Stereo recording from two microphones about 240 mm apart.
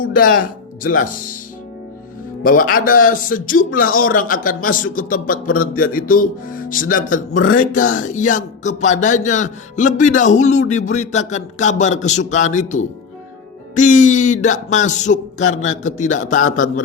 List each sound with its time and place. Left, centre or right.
0.0 s speech: left
2.4 s speech: left